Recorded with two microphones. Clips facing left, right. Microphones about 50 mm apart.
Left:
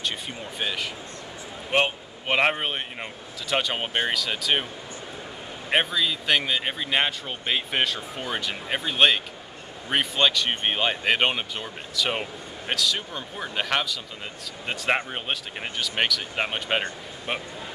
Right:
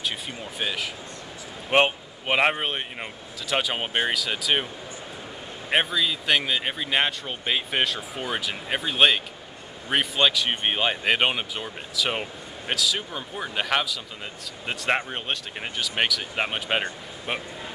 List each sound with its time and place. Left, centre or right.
0.0 s speech: centre
1.7 s a man's voice: right
2.2 s speech: centre
5.7 s speech: centre